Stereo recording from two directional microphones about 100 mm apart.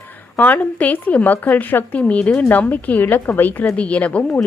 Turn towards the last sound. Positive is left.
turn(degrees=15)  # may be behind; listen again after turning